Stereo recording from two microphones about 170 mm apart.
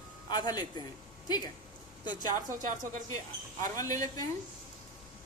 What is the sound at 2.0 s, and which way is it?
Speech, 25° left (ahead or behind).